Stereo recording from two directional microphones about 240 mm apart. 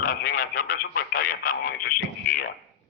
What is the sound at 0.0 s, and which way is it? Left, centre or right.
Radio, left.